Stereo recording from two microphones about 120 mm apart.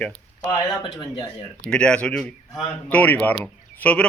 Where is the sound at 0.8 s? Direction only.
40° left (ahead or behind).